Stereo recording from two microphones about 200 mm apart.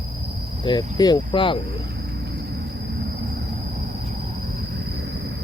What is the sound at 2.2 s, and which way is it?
Vehicle, 55° right (ahead or behind).